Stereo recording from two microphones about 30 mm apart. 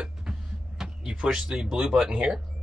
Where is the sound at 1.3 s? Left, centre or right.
Right.